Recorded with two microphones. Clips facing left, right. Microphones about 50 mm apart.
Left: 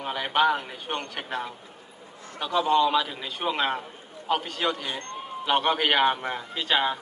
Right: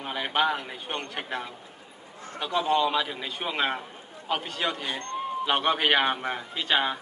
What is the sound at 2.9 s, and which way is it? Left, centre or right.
A man's voice, centre.